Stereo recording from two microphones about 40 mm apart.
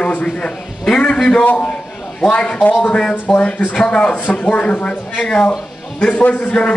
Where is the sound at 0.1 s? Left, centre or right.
Left.